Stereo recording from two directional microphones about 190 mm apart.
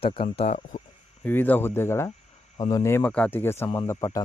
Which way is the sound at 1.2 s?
10° left (ahead or behind).